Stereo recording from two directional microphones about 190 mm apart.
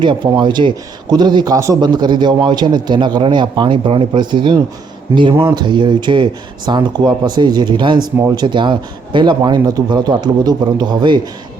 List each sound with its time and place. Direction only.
0.0 s speech: 25° right (ahead or behind)